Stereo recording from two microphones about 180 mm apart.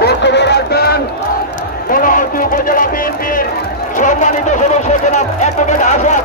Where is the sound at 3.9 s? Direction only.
45° left (ahead or behind).